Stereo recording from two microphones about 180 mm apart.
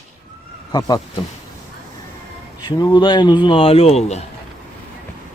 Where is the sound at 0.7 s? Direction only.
20° left (ahead or behind).